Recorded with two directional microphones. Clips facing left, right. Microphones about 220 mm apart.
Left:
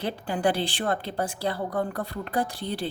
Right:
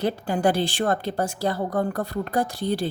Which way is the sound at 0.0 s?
45° right (ahead or behind).